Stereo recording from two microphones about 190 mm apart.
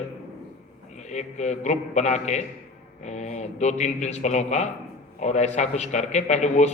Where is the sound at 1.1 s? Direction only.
35° left (ahead or behind).